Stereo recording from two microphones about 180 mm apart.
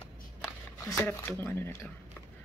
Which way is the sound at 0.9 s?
10° left (ahead or behind).